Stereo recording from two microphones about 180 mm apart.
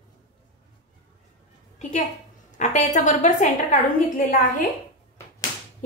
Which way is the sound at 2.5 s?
45° left (ahead or behind).